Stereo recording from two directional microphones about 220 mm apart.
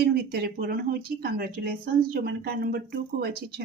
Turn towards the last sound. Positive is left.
turn(degrees=-45)  # may be behind; listen again after turning